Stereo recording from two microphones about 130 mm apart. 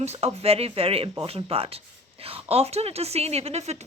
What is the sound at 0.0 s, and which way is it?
Speech, 55° right (ahead or behind).